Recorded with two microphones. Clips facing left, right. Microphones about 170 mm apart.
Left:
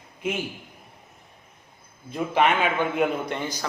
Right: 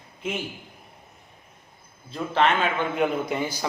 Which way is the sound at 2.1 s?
10° left (ahead or behind).